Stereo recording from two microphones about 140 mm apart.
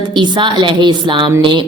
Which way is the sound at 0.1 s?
35° right (ahead or behind).